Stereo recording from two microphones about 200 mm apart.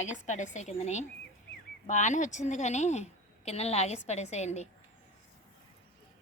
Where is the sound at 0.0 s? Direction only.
35° left (ahead or behind).